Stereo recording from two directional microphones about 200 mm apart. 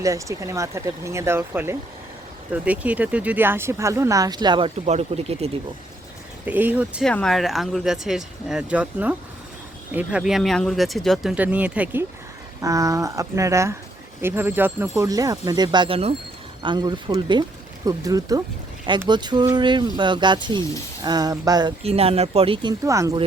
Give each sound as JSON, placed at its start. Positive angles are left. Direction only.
{"t": 0.0, "sound": "speech", "side_deg": -15}
{"t": 6.4, "sound": "speech", "side_deg": -10}